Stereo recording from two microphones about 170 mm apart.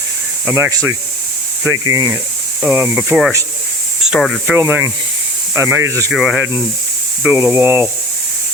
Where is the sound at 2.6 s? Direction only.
10° right (ahead or behind).